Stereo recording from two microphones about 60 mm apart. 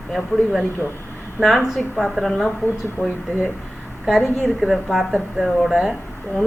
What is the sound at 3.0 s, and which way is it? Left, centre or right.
Speech, left.